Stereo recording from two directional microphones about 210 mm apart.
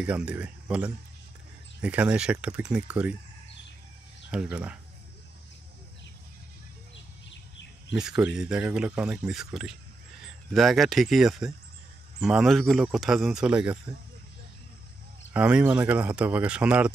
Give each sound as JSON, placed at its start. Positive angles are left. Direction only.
{"t": 0.0, "sound": "speech", "side_deg": -5}
{"t": 4.3, "sound": "speech", "side_deg": -5}
{"t": 7.9, "sound": "speech", "side_deg": -5}
{"t": 15.3, "sound": "speech", "side_deg": -5}